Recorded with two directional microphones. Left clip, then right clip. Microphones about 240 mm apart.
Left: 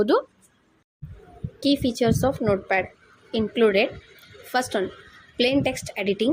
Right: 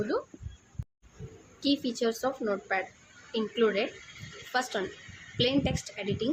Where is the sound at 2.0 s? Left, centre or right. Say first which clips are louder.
Left 7 dB; left.